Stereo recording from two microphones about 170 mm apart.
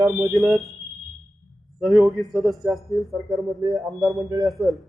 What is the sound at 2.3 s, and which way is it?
Speech, centre (ahead or behind).